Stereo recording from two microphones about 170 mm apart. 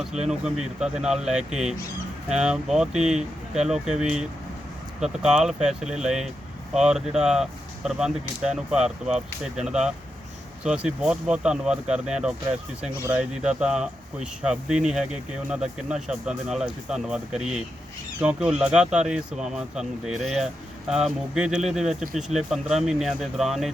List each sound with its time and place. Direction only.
0.3 s speech: 5° right (ahead or behind)
2.3 s speech: 5° right (ahead or behind)